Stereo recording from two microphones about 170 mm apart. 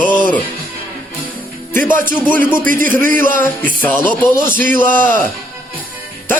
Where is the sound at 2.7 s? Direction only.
55° right (ahead or behind).